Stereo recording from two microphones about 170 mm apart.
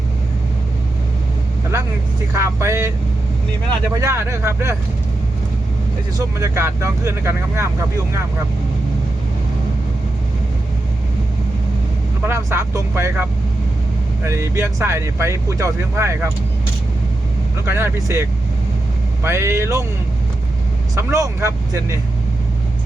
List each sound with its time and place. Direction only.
2.3 s speech: 15° right (ahead or behind)
6.1 s speech: 15° right (ahead or behind)
12.2 s speech: 15° right (ahead or behind)
14.3 s speech: 15° right (ahead or behind)
17.7 s speech: 15° right (ahead or behind)
20.9 s speech: 15° right (ahead or behind)